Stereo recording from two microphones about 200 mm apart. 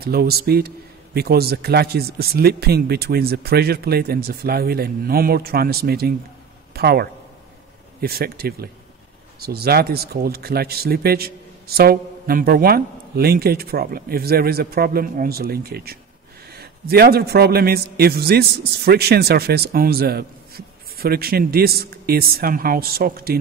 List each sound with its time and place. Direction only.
0.0 s a man's voice: 50° right (ahead or behind)